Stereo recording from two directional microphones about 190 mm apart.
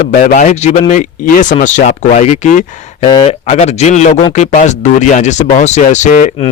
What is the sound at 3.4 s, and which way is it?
Speech, 35° left (ahead or behind).